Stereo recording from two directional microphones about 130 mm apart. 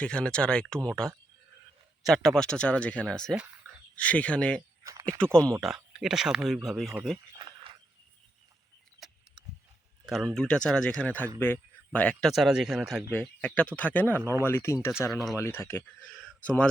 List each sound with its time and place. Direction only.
0.0 s speech: 5° left (ahead or behind)
4.8 s a sound: 25° right (ahead or behind)
5.2 s speech: 5° left (ahead or behind)
7.3 s a sound: 40° right (ahead or behind)
10.1 s speech: centre (ahead or behind)
12.3 s speech: 5° right (ahead or behind)
13.1 s speech: 10° left (ahead or behind)
15.1 s speech: centre (ahead or behind)
15.4 s speech: 20° left (ahead or behind)
16.2 s a sound: 10° left (ahead or behind)